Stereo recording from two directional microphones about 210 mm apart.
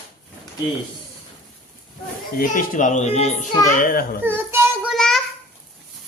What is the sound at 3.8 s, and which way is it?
Speech, 40° left (ahead or behind).